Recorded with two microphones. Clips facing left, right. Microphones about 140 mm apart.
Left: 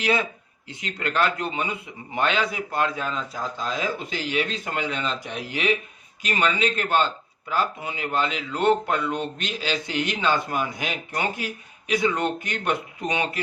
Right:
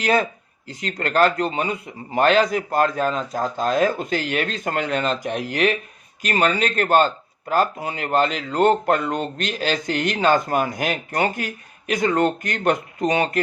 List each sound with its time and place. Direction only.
0.0 s a man's voice: 45° right (ahead or behind)